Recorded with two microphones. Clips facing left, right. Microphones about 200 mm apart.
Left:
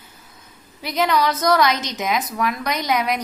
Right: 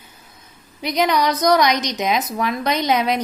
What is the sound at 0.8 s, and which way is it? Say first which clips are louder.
Speech: right 1 dB; 20° right (ahead or behind).